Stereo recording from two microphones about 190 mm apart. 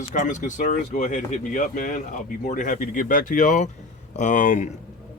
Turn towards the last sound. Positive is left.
turn(degrees=40)  # may be behind; listen again after turning